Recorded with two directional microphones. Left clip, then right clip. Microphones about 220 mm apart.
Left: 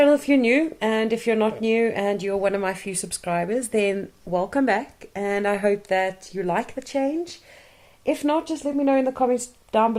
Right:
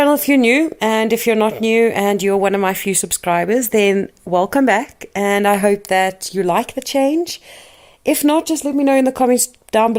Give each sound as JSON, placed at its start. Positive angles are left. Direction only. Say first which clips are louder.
{"t": 0.0, "sound": "speech", "louder": "right 4 dB", "side_deg": -35}